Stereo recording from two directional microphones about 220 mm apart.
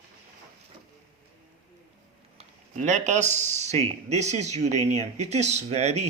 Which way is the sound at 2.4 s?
30° right (ahead or behind).